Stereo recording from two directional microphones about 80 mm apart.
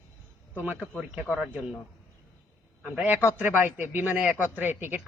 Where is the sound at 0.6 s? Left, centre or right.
Right.